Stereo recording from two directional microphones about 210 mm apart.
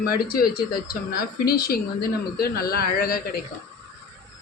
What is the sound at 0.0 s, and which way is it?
A man's voice, 45° left (ahead or behind).